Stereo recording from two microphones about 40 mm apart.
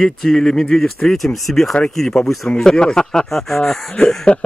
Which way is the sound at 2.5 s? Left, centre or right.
Centre.